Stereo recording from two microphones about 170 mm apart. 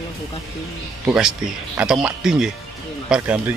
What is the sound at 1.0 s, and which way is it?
A man's voice, 5° right (ahead or behind).